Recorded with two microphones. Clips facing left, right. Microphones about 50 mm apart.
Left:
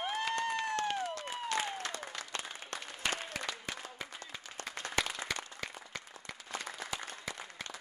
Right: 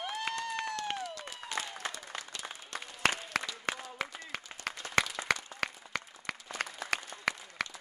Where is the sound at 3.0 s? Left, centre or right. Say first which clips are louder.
Right 5 dB; right.